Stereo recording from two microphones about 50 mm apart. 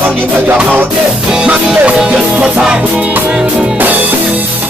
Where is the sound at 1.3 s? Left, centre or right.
Centre.